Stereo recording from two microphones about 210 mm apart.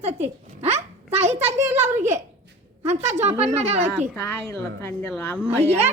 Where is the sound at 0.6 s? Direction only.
30° right (ahead or behind).